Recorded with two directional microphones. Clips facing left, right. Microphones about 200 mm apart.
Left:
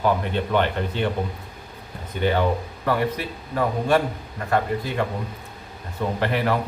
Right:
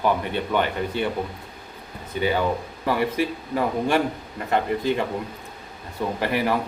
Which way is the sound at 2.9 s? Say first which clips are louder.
Right 1 dB; 10° right (ahead or behind).